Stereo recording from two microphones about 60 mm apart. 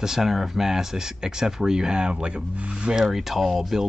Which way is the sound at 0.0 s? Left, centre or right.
Centre.